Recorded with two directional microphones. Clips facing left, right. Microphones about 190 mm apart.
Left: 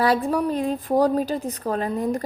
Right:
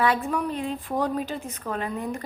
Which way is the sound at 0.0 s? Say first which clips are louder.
Left 4 dB; 35° left (ahead or behind).